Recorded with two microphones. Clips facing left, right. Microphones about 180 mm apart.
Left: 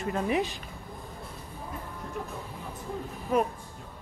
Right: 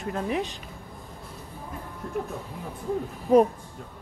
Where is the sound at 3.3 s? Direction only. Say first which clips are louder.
Right 8 dB; 35° right (ahead or behind).